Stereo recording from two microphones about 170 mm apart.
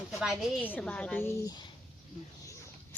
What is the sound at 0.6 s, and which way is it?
Speech, 10° left (ahead or behind).